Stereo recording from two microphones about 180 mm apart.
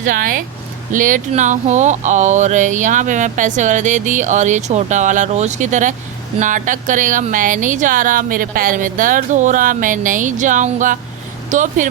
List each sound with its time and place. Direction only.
0.0 s speech: 50° right (ahead or behind)